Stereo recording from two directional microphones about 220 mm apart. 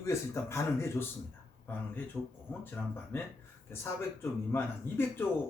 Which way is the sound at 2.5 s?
10° left (ahead or behind).